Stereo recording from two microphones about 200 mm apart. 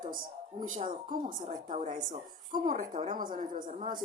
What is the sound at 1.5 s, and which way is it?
Speech, 25° right (ahead or behind).